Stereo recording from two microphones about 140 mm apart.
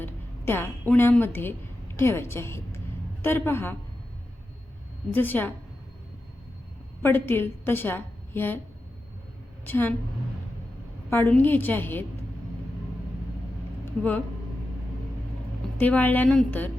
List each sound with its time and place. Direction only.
0.0 s a woman's voice: 15° left (ahead or behind)
5.1 s a woman's voice: 15° left (ahead or behind)
7.0 s a woman's voice: 15° left (ahead or behind)
9.6 s a woman's voice: 15° left (ahead or behind)
11.1 s a woman's voice: 15° left (ahead or behind)
15.8 s a woman's voice: 10° left (ahead or behind)